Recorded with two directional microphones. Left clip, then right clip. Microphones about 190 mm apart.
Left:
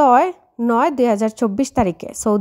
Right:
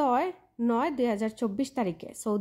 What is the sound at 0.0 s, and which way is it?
A woman's voice, 35° left (ahead or behind).